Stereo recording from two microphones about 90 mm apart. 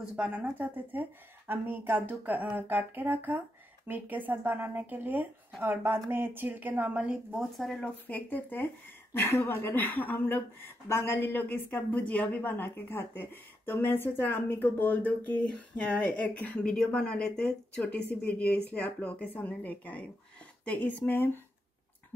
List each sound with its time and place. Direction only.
0.0 s speech: 15° right (ahead or behind)
7.3 s speech: centre (ahead or behind)
7.8 s speech: 15° left (ahead or behind)
11.7 s speech: 15° left (ahead or behind)